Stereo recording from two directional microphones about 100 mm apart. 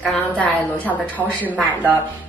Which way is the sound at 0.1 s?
15° left (ahead or behind).